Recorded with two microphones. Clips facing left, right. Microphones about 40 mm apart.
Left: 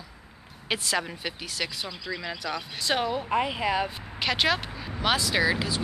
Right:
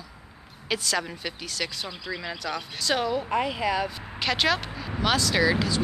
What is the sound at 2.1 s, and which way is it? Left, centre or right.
Speech, centre.